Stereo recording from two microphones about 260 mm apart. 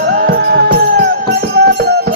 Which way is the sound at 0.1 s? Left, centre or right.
Right.